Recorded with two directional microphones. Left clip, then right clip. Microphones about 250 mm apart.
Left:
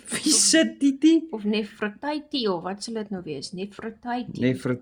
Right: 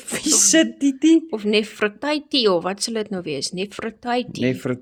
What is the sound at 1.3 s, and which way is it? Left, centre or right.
Speech, right.